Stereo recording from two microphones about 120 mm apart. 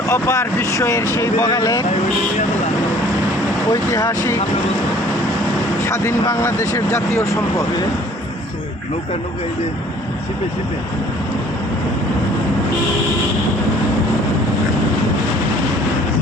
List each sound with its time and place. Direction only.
0.1 s speech: 25° left (ahead or behind)
3.7 s speech: 30° left (ahead or behind)
5.8 s speech: 20° left (ahead or behind)